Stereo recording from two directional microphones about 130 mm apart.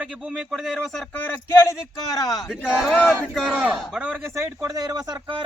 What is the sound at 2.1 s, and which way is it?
Speech, 30° left (ahead or behind).